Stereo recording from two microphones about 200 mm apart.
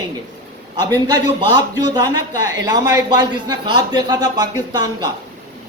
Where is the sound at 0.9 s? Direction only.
20° right (ahead or behind).